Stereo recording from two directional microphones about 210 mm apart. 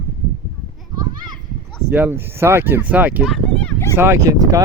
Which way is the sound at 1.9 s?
10° right (ahead or behind).